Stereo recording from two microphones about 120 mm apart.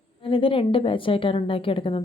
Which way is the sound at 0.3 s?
50° left (ahead or behind).